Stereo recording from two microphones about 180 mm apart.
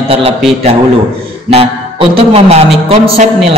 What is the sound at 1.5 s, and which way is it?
Speech, 35° right (ahead or behind).